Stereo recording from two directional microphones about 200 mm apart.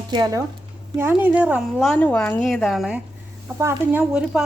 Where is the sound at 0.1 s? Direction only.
20° right (ahead or behind).